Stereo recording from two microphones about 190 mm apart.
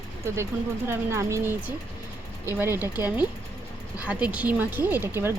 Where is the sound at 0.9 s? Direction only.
15° right (ahead or behind).